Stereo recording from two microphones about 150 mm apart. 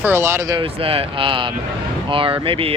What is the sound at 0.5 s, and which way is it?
Speech, 40° right (ahead or behind).